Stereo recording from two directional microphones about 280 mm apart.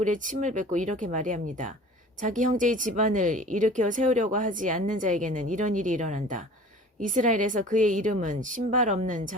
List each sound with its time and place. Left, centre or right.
0.0 s speech: right